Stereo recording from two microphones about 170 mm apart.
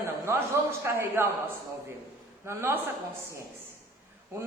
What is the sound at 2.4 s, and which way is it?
Speech, 15° right (ahead or behind).